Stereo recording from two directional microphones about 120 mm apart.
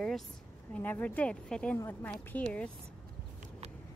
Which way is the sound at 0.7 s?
15° left (ahead or behind).